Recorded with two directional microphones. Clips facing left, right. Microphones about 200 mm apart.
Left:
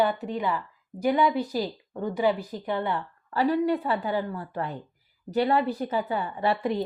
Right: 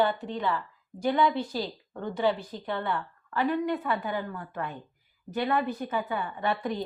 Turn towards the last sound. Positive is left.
turn(degrees=30)  # may be behind; listen again after turning